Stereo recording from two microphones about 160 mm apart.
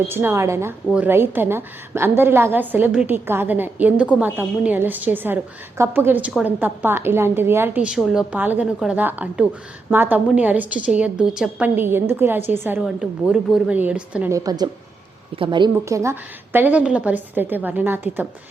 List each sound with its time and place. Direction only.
0.1 s a woman's voice: 15° right (ahead or behind)
7.9 s a woman's voice: centre (ahead or behind)
14.3 s a woman's voice: 25° right (ahead or behind)